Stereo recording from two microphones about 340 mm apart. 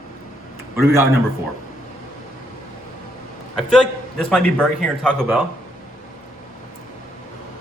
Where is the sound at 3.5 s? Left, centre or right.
Centre.